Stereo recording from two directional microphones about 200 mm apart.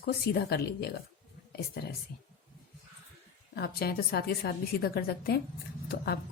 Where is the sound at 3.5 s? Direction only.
50° left (ahead or behind).